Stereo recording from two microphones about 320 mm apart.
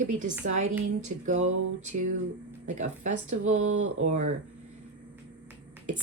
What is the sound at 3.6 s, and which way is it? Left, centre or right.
Speech, right.